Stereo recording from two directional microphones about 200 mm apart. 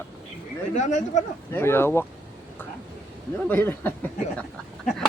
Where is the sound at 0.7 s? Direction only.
35° left (ahead or behind).